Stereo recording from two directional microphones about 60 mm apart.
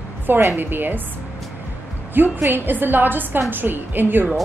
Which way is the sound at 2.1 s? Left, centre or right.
Right.